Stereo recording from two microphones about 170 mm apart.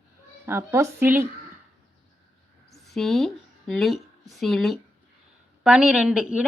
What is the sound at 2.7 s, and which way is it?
A woman's voice, centre (ahead or behind).